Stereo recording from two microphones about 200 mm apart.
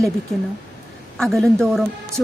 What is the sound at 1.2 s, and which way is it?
Speech, centre (ahead or behind).